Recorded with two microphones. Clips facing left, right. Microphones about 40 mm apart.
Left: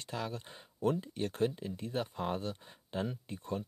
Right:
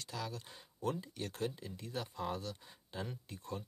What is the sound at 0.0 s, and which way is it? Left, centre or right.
Speech, left.